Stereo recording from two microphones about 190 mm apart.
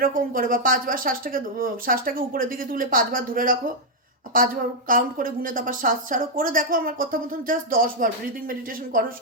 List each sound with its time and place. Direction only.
0.0 s speech: 50° right (ahead or behind)